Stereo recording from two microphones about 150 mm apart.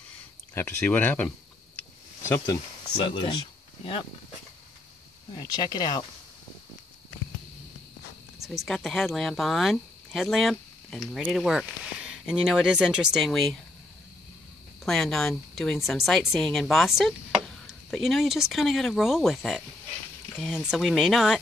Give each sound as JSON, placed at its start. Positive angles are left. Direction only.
{"t": 0.6, "sound": "speech", "side_deg": 10}
{"t": 1.8, "sound": "a sound", "side_deg": 15}
{"t": 3.0, "sound": "speech", "side_deg": 30}
{"t": 5.3, "sound": "speech", "side_deg": 30}
{"t": 8.5, "sound": "speech", "side_deg": 0}
{"t": 14.9, "sound": "speech", "side_deg": 0}
{"t": 20.6, "sound": "speech", "side_deg": 0}